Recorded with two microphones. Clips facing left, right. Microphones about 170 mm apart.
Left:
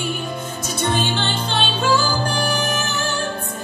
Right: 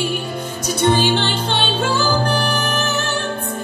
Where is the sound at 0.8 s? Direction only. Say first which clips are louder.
Right 6 dB; 60° right (ahead or behind).